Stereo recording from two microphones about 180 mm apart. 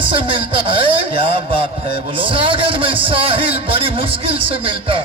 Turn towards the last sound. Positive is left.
turn(degrees=-30)  # may be behind; listen again after turning